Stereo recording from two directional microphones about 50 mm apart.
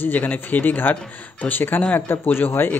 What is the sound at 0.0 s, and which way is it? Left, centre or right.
Speech, left.